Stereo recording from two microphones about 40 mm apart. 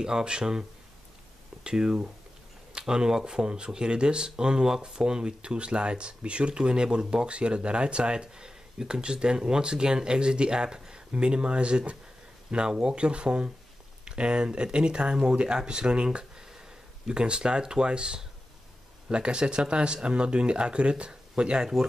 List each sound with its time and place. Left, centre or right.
0.0 s speech: right